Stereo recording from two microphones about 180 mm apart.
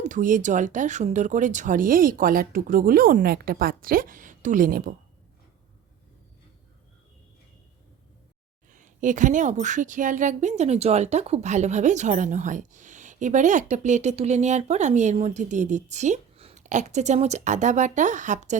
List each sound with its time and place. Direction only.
0.0 s speech: 45° right (ahead or behind)
8.7 s a woman's voice: 45° right (ahead or behind)